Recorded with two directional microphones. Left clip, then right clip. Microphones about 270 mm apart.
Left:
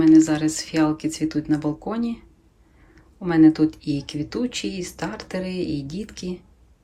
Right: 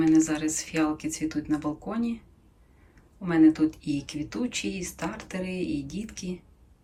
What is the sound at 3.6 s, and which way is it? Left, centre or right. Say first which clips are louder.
Speech: left 4 dB; left.